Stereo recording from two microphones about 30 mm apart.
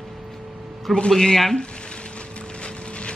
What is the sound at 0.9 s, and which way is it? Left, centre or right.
Speech, centre.